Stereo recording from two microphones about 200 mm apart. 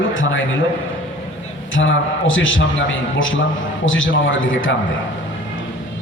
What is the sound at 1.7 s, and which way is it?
A man's voice, 75° left (ahead or behind).